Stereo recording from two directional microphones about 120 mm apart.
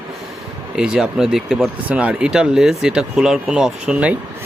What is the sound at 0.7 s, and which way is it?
Speech, 5° right (ahead or behind).